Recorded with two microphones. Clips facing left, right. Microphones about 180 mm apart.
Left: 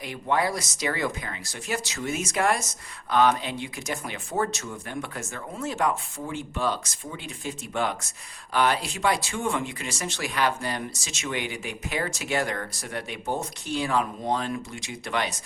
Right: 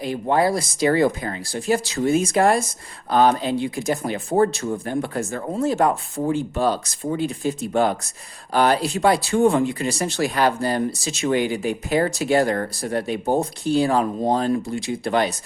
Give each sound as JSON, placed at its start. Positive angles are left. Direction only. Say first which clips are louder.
{"t": 0.0, "sound": "speech", "louder": "right 6 dB", "side_deg": -35}